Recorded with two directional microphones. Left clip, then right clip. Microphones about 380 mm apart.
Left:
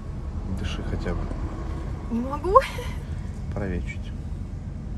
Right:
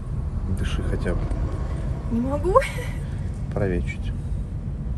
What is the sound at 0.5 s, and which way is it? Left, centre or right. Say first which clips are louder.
Speech: right 3 dB; centre.